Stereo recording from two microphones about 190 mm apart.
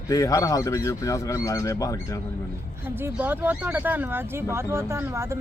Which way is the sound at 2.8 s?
10° right (ahead or behind).